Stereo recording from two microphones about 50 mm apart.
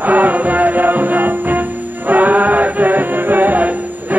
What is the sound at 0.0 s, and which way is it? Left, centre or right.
Music, right.